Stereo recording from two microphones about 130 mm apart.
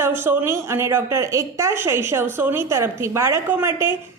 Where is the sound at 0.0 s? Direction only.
15° right (ahead or behind).